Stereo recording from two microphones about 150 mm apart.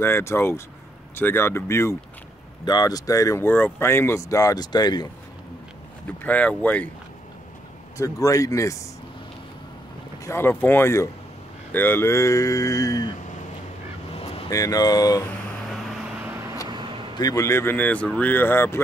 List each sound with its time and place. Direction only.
0.0 s speech: 15° left (ahead or behind)
6.0 s speech: 10° left (ahead or behind)
8.0 s speech: 20° left (ahead or behind)
10.2 s speech: 15° left (ahead or behind)
14.1 s vehicle: 40° left (ahead or behind)
14.5 s speech: 25° left (ahead or behind)
16.6 s vehicle: 30° right (ahead or behind)
17.1 s speech: 25° left (ahead or behind)